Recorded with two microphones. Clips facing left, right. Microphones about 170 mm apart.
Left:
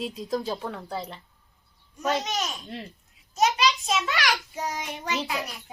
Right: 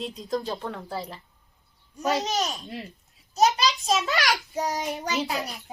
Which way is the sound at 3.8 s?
40° right (ahead or behind).